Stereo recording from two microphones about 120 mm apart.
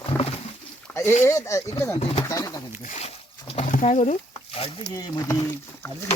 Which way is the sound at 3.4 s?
65° left (ahead or behind).